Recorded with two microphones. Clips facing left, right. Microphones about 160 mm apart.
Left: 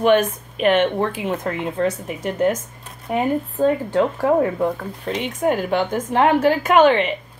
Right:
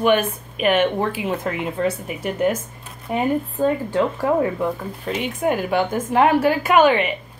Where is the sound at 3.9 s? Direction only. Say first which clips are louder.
Left 2 dB; 35° left (ahead or behind).